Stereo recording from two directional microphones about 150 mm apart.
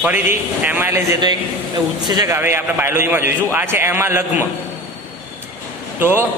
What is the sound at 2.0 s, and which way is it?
Speech, 25° right (ahead or behind).